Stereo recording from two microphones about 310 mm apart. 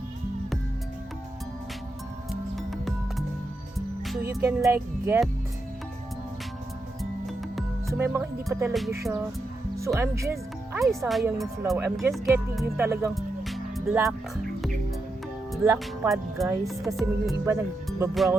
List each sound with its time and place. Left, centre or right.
2.6 s music: centre
4.3 s speech: centre
7.0 s music: centre
9.7 s speech: centre
12.7 s music: centre
15.6 s music: centre